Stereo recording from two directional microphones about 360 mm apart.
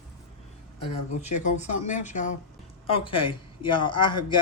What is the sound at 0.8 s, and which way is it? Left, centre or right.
A man's voice, centre.